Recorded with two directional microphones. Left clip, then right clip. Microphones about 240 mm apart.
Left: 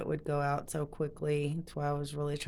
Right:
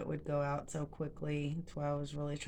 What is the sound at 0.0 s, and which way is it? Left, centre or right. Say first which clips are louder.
Speech: left 4 dB; left.